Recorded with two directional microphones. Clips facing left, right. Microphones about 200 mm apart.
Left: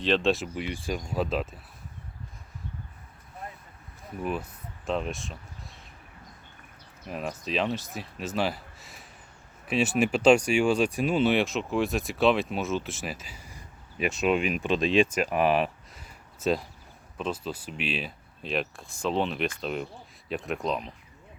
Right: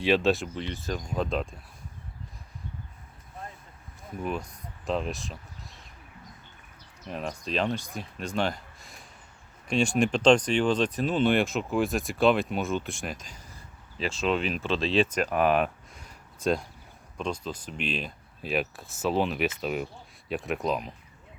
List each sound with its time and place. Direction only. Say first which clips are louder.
0.0 s speech: right 1 dB; 5° right (ahead or behind)
4.2 s speech: left 1 dB; 5° left (ahead or behind)
7.1 s speech: even; 5° left (ahead or behind)